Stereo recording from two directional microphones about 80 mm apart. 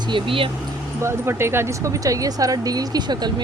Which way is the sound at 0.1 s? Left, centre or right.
Right.